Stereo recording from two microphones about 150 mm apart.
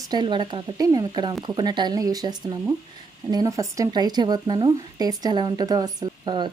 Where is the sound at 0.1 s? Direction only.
30° right (ahead or behind).